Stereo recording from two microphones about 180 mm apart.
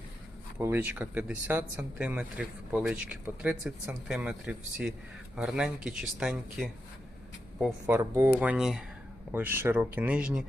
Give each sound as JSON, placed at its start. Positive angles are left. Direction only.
{"t": 0.6, "sound": "speech", "side_deg": -10}
{"t": 7.9, "sound": "speech", "side_deg": -15}